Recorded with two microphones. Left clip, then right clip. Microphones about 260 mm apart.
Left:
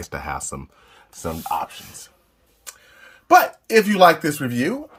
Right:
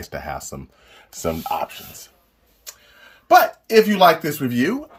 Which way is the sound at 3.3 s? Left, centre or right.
Centre.